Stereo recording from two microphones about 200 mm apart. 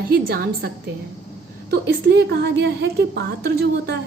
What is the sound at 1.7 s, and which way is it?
A woman's voice, 50° right (ahead or behind).